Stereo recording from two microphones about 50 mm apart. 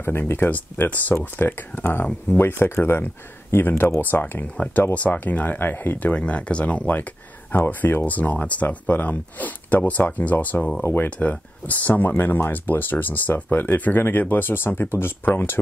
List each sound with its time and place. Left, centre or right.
0.0 s speech: left
0.5 s speech: left
1.1 s speech: left
4.9 s speech: left
6.1 s speech: left
10.8 s speech: left
11.1 s speech: left